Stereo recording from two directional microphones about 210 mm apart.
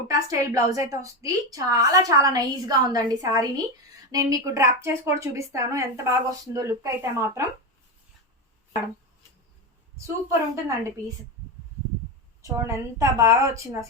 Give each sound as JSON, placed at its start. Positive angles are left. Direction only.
{"t": 0.1, "sound": "a woman's voice", "side_deg": -15}
{"t": 10.5, "sound": "a woman's voice", "side_deg": -15}
{"t": 12.4, "sound": "a woman's voice", "side_deg": -15}